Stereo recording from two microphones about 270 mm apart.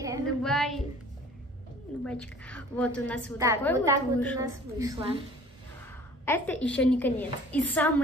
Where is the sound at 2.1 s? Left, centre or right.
Centre.